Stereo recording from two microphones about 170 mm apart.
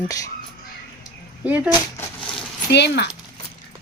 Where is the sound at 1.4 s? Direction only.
10° right (ahead or behind).